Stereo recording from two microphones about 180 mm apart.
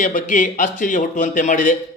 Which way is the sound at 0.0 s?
45° left (ahead or behind).